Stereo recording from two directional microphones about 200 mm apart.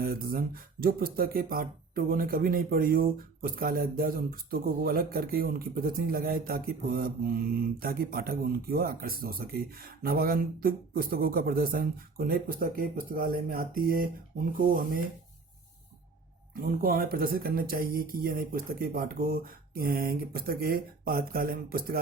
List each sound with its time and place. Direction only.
0.0 s speech: 45° right (ahead or behind)
16.6 s speech: 45° right (ahead or behind)